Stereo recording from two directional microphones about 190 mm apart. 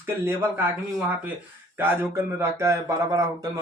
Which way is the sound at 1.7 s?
10° right (ahead or behind).